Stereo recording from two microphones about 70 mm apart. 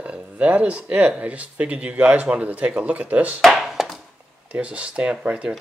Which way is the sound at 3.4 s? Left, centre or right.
Centre.